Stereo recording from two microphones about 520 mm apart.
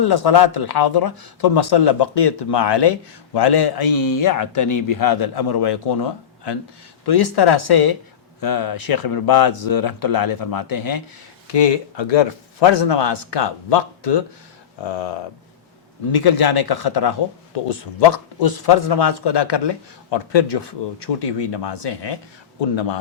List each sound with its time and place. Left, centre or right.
0.0 s a man's voice: left
11.4 s a man's voice: left
16.1 s a man's voice: left